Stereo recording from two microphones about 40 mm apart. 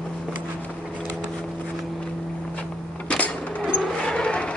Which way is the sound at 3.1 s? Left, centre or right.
Left.